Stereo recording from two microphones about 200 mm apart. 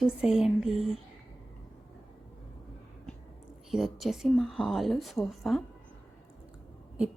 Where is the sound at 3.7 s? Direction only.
Centre (ahead or behind).